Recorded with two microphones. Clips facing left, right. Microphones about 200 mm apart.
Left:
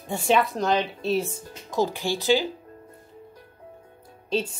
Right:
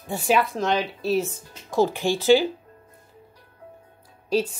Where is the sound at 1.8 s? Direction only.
15° right (ahead or behind).